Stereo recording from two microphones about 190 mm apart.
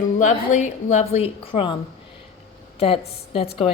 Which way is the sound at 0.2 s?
40° left (ahead or behind).